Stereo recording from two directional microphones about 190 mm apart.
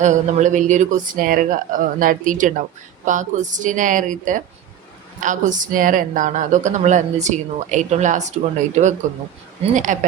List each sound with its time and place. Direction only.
0.0 s speech: 40° right (ahead or behind)